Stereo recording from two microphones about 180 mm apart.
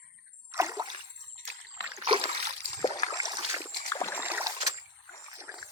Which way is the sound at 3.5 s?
15° right (ahead or behind).